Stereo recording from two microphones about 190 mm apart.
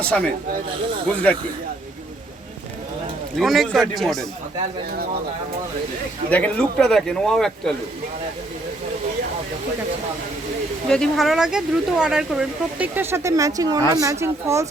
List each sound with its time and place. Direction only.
0.0 s speech: 5° left (ahead or behind)
3.3 s speech: centre (ahead or behind)
6.3 s speech: 5° left (ahead or behind)
10.8 s speech: 5° left (ahead or behind); by 14.7 s 15° right (ahead or behind)